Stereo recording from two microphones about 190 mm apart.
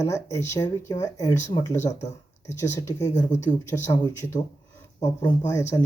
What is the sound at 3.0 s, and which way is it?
Speech, 35° left (ahead or behind).